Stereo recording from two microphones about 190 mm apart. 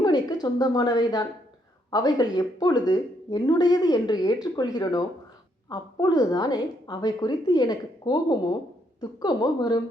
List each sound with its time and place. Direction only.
0.0 s a woman's voice: 20° left (ahead or behind)